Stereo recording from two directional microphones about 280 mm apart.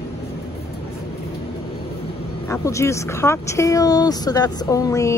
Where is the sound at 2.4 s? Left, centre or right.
Centre.